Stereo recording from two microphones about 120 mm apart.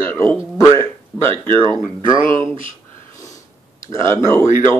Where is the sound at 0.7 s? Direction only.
45° right (ahead or behind).